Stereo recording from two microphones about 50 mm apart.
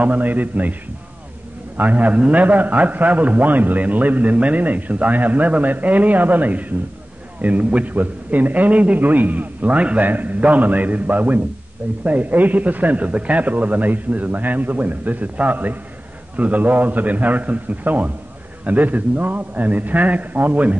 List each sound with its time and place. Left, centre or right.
0.0 s a man's voice: right
1.8 s a man's voice: right